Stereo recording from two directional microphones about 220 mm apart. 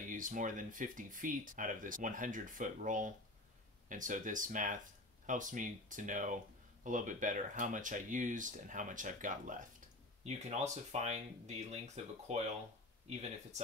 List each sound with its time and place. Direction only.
0.0 s speech: 35° right (ahead or behind)